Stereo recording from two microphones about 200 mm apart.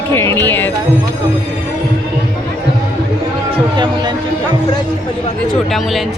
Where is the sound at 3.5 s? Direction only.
20° right (ahead or behind).